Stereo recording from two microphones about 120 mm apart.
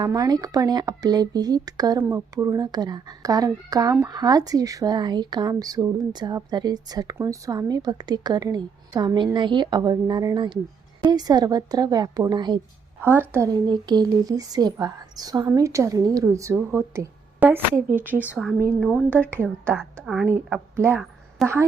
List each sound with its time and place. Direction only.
0.0 s speech: 30° right (ahead or behind)
13.0 s a woman's voice: 20° right (ahead or behind)
13.5 s a woman's voice: 35° right (ahead or behind); by 18.3 s 15° right (ahead or behind)
18.8 s a woman's voice: centre (ahead or behind)
19.3 s a woman's voice: 20° right (ahead or behind)
19.7 s a woman's voice: 5° left (ahead or behind)
20.7 s a woman's voice: 20° right (ahead or behind)
21.4 s a woman's voice: centre (ahead or behind)